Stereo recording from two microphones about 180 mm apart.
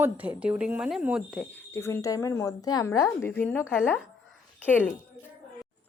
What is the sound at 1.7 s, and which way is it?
A woman's voice, 15° left (ahead or behind).